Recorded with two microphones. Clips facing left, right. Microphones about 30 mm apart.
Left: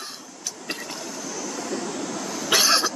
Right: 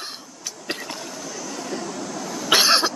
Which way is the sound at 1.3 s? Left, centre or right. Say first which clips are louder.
Left 1 dB; centre.